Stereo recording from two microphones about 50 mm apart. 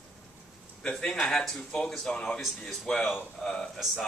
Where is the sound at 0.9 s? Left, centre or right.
Left.